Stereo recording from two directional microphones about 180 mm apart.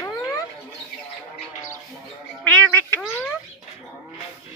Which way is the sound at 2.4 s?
10° left (ahead or behind).